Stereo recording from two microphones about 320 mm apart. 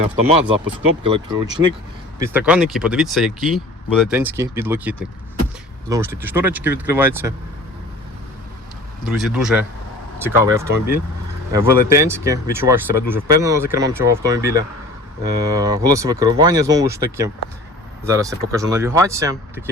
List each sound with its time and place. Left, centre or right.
0.0 s speech: centre
2.1 s speech: centre
9.0 s speech: centre